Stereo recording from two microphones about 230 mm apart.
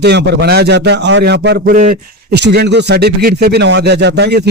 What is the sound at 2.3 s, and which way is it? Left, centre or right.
Speech, right.